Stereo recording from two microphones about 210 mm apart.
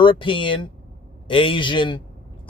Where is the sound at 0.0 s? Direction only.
25° left (ahead or behind).